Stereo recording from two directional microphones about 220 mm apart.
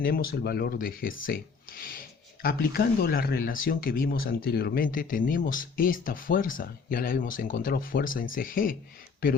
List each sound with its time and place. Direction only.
0.0 s speech: 45° left (ahead or behind)